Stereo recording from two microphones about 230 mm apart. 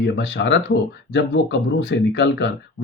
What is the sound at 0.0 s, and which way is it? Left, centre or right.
Speech, left.